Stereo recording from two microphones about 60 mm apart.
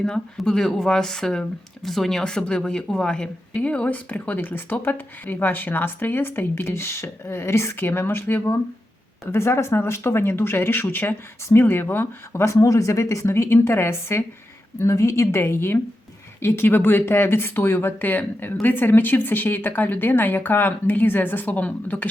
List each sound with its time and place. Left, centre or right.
0.0 s a woman's voice: centre; by 12.5 s left
12.5 s speech: left
14.8 s speech: left
15.4 s a woman's voice: left